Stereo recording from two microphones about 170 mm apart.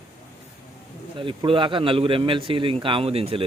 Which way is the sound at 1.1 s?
30° right (ahead or behind).